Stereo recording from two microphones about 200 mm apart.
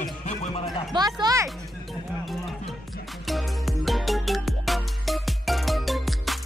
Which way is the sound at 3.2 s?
Centre (ahead or behind).